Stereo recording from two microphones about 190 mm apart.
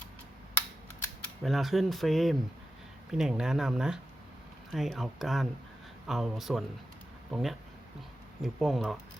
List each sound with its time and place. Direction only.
1.5 s speech: centre (ahead or behind)